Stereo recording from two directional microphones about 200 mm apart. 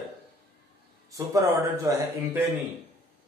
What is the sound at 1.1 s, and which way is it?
A man's voice, 15° right (ahead or behind).